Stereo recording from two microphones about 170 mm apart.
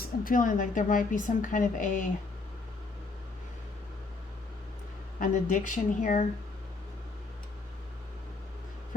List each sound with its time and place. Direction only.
0.0 s a woman's voice: 55° left (ahead or behind)
5.2 s a woman's voice: 50° left (ahead or behind)